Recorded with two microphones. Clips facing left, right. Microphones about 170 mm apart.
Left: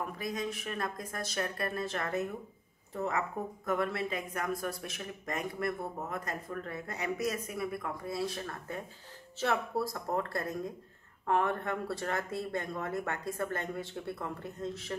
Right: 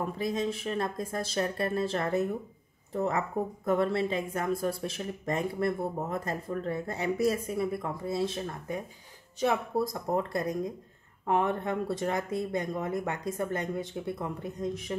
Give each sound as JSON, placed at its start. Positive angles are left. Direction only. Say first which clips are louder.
{"t": 0.0, "sound": "speech", "louder": "right 6 dB", "side_deg": -25}